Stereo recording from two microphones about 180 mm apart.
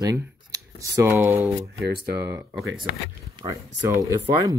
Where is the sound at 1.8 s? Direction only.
65° right (ahead or behind).